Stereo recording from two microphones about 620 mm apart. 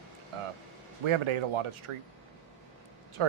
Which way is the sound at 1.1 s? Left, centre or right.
Right.